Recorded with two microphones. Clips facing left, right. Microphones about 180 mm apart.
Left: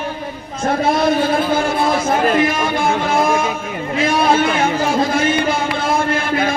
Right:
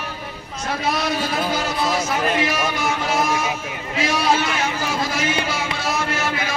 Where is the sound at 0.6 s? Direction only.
50° left (ahead or behind).